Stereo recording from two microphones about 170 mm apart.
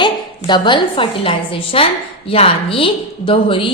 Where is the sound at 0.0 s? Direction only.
25° left (ahead or behind).